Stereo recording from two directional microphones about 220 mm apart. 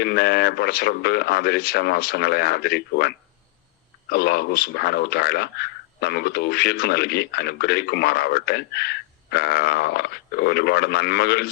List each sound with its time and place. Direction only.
0.0 s speech: 45° left (ahead or behind)